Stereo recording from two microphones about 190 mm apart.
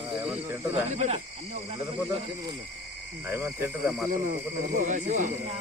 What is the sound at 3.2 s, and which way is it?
Speech, 10° right (ahead or behind).